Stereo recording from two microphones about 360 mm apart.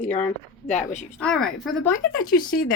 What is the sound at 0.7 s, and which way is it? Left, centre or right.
Speech, centre.